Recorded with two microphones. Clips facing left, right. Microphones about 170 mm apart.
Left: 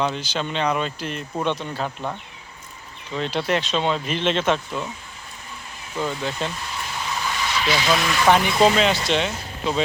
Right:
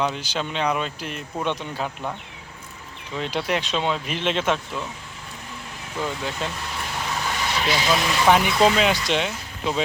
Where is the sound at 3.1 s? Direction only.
10° right (ahead or behind).